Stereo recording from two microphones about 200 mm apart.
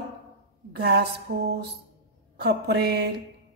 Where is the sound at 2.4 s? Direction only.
55° right (ahead or behind).